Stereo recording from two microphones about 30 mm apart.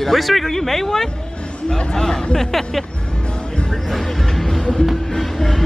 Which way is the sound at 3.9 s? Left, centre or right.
Centre.